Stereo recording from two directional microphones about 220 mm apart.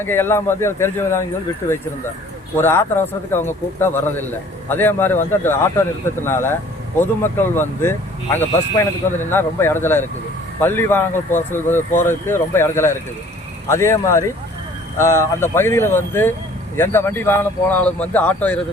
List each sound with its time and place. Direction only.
0.0 s a man's voice: 10° left (ahead or behind)